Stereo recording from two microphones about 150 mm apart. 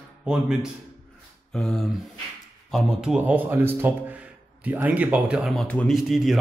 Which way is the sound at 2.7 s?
5° right (ahead or behind).